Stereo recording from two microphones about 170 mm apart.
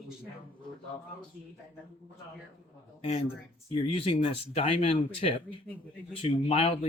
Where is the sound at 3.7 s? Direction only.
35° left (ahead or behind).